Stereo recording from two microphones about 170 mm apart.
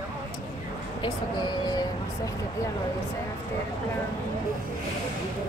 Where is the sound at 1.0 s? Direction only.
25° left (ahead or behind).